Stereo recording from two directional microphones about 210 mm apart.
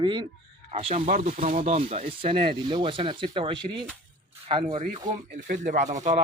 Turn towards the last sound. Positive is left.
turn(degrees=-35)  # may be behind; listen again after turning